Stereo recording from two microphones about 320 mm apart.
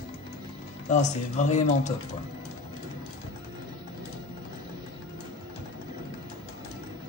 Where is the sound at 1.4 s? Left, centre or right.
Left.